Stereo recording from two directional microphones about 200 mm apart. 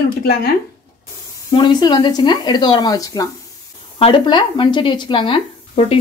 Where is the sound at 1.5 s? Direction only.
25° left (ahead or behind).